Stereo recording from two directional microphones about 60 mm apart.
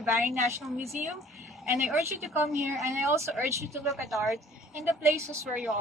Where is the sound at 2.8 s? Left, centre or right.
Right.